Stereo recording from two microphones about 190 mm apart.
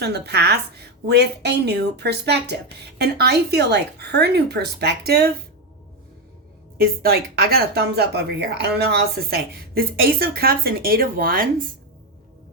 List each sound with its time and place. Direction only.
0.0 s speech: 60° right (ahead or behind)
6.7 s speech: 55° right (ahead or behind)